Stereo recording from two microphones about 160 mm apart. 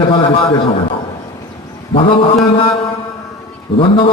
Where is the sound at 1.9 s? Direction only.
35° left (ahead or behind).